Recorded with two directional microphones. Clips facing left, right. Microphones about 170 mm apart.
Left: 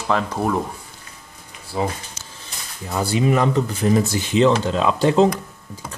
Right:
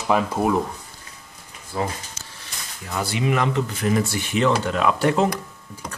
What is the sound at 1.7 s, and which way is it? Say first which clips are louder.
Speech: left 3 dB; 15° left (ahead or behind).